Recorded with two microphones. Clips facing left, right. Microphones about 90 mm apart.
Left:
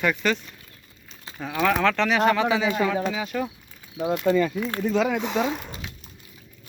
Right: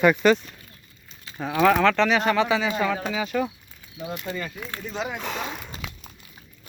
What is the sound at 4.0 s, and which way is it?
Speech, 70° left (ahead or behind).